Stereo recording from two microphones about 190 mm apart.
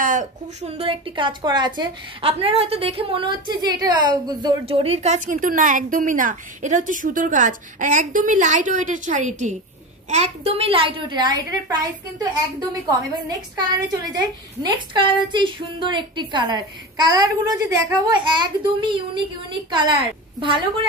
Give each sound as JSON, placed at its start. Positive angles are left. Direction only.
{"t": 0.0, "sound": "a woman's voice", "side_deg": -40}
{"t": 20.3, "sound": "a woman's voice", "side_deg": -25}